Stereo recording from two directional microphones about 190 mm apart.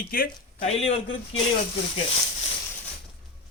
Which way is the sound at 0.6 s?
30° left (ahead or behind).